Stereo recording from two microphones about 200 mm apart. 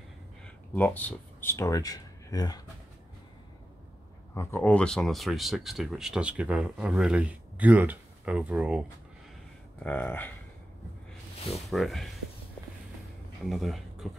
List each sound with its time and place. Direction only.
0.7 s speech: 10° left (ahead or behind)
4.3 s speech: 10° left (ahead or behind); by 8.8 s 5° right (ahead or behind)
9.8 s speech: 10° left (ahead or behind)
11.5 s speech: centre (ahead or behind)
13.5 s speech: centre (ahead or behind)